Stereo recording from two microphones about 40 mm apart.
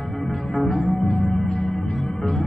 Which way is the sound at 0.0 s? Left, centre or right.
Centre.